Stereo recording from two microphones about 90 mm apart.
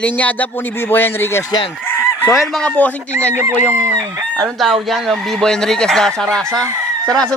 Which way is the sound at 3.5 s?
25° right (ahead or behind).